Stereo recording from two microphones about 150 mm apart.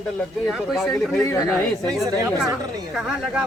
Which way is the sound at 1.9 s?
Centre (ahead or behind).